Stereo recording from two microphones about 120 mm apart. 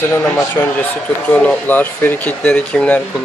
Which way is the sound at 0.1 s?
15° left (ahead or behind).